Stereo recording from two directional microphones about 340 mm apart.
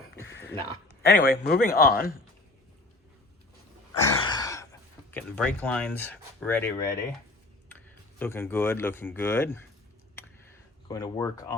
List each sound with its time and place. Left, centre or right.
1.0 s a man's voice: left
4.0 s speech: centre
8.2 s speech: centre
10.8 s speech: centre